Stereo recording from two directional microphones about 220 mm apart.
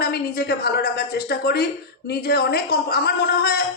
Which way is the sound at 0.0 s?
45° left (ahead or behind).